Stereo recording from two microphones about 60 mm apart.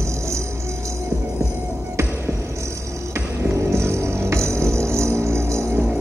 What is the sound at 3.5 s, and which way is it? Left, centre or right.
Music, right.